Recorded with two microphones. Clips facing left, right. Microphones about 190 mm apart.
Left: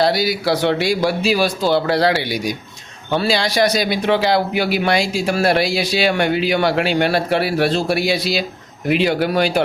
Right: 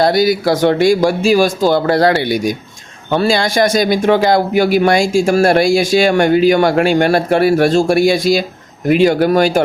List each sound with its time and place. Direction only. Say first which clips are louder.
0.0 s a man's voice: right 5 dB; 50° right (ahead or behind)